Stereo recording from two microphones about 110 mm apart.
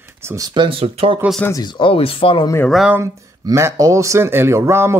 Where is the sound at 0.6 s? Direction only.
55° right (ahead or behind).